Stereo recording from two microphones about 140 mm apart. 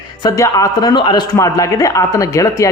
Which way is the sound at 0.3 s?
25° left (ahead or behind).